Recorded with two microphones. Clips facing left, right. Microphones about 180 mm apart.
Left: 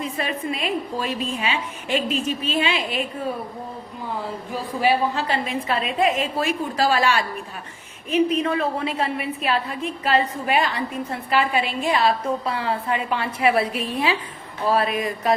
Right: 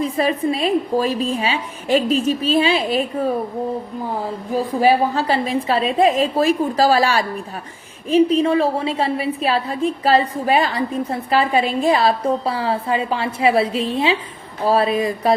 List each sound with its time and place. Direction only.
0.0 s a woman's voice: 35° right (ahead or behind)
4.5 s a woman's voice: 40° right (ahead or behind)